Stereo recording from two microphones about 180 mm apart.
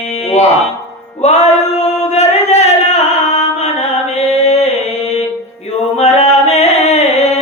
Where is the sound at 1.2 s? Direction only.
40° left (ahead or behind).